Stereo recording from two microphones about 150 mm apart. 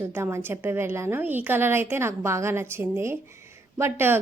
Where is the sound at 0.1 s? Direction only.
20° right (ahead or behind).